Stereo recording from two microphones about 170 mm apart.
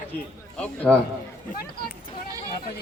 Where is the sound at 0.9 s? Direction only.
5° left (ahead or behind).